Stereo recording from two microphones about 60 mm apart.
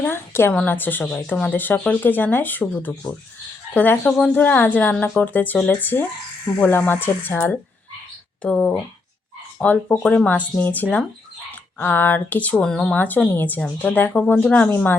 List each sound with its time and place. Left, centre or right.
0.0 s a woman's voice: left
8.4 s speech: left
12.6 s speech: centre
12.9 s speech: left